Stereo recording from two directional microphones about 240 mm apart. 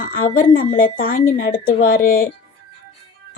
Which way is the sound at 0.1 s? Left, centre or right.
Left.